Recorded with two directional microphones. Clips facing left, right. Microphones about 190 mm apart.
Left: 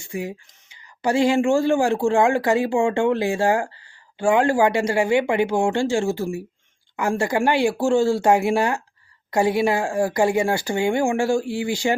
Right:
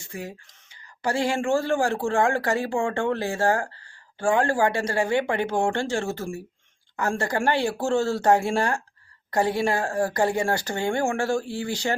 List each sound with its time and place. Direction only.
0.0 s speech: 15° left (ahead or behind)